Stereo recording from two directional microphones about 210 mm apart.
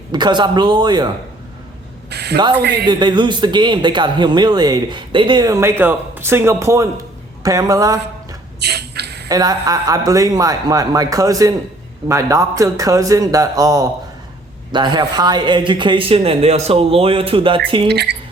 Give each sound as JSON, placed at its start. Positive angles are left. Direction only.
{"t": 0.1, "sound": "speech", "side_deg": -20}
{"t": 2.0, "sound": "a man's voice", "side_deg": -50}
{"t": 2.8, "sound": "speech", "side_deg": -20}
{"t": 8.6, "sound": "a sound", "side_deg": -50}
{"t": 9.3, "sound": "speech", "side_deg": -20}
{"t": 17.8, "sound": "speech", "side_deg": -55}